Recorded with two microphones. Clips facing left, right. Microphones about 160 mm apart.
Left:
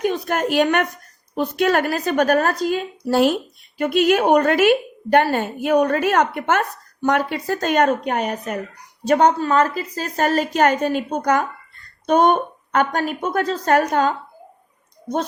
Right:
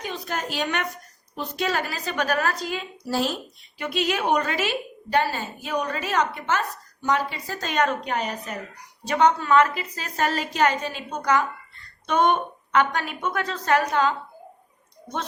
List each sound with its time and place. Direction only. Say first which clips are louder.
0.0 s a woman's voice: left 10 dB; 55° left (ahead or behind)